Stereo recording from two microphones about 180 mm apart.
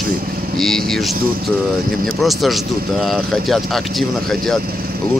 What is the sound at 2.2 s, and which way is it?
Speech, centre (ahead or behind).